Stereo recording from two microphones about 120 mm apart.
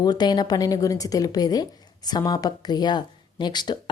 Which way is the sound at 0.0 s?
35° left (ahead or behind).